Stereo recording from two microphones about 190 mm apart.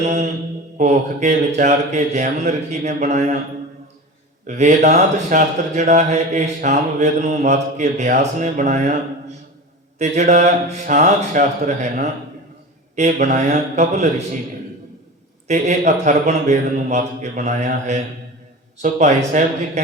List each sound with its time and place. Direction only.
0.0 s speech: 35° right (ahead or behind)
4.4 s speech: 40° right (ahead or behind)
10.0 s speech: 40° right (ahead or behind)
15.4 s speech: 40° right (ahead or behind)